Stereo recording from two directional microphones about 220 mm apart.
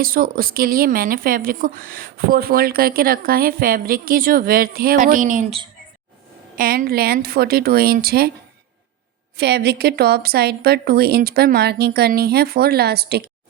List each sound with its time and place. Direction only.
0.0 s a woman's voice: 40° right (ahead or behind)
6.6 s a woman's voice: 40° right (ahead or behind)
9.4 s a woman's voice: 45° right (ahead or behind)